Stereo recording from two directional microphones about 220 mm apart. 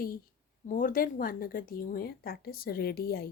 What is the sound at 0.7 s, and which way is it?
A woman's voice, 40° left (ahead or behind).